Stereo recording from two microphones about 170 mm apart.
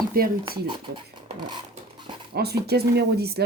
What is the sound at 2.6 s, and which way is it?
Speech, 70° right (ahead or behind).